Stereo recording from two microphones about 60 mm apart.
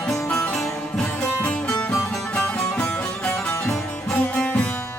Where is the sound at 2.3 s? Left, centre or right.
Centre.